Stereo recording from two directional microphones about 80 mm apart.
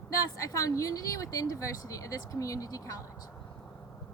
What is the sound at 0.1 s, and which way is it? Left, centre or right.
Speech, left.